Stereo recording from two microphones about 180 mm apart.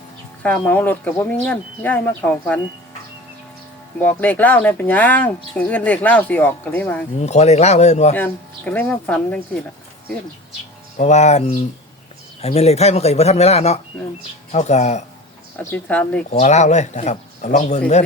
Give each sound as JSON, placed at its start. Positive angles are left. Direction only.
{"t": 0.4, "sound": "speech", "side_deg": 5}
{"t": 4.0, "sound": "speech", "side_deg": 10}
{"t": 7.2, "sound": "speech", "side_deg": 35}
{"t": 8.1, "sound": "speech", "side_deg": 10}
{"t": 10.9, "sound": "speech", "side_deg": 40}
{"t": 15.6, "sound": "speech", "side_deg": 10}
{"t": 16.3, "sound": "speech", "side_deg": 40}